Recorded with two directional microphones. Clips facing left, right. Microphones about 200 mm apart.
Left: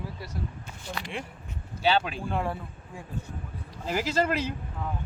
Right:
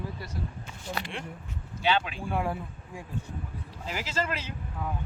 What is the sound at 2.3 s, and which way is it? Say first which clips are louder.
Speech: right 1 dB; 10° right (ahead or behind).